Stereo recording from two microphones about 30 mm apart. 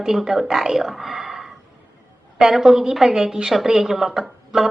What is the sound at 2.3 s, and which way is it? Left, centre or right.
A woman's voice, centre.